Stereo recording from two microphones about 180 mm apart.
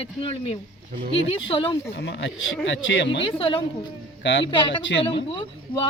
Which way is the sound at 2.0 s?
90° left.